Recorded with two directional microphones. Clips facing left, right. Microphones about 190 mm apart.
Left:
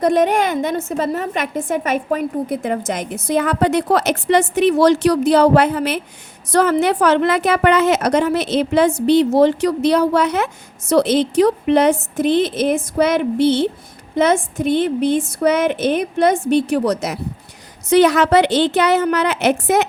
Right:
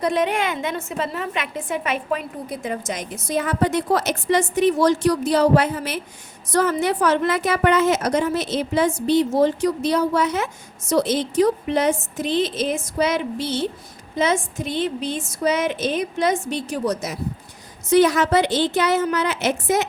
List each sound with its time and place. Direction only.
0.0 s a woman's voice: 45° left (ahead or behind); by 19.9 s 60° left (ahead or behind)